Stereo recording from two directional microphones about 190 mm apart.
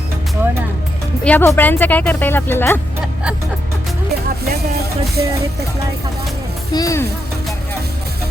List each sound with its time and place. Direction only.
1.2 s speech: 10° left (ahead or behind)
4.4 s music: 55° right (ahead or behind)
6.7 s speech: 15° left (ahead or behind)